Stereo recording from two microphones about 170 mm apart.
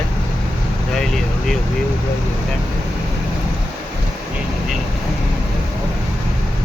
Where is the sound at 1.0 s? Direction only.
Centre (ahead or behind).